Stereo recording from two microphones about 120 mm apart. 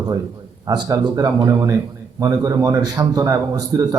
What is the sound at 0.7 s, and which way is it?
A man's voice, 35° right (ahead or behind).